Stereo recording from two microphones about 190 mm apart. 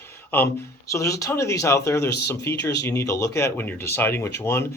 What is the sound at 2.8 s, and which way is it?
Speech, 15° left (ahead or behind).